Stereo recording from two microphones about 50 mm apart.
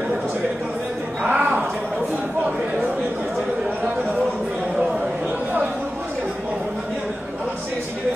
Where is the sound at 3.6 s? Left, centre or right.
Right.